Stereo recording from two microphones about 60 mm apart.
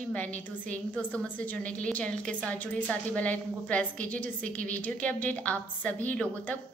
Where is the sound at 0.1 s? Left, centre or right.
Left.